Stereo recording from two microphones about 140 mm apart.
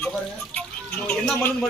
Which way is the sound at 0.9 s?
5° left (ahead or behind).